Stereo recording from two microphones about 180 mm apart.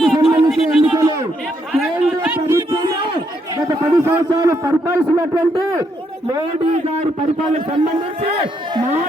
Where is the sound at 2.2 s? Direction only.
10° right (ahead or behind).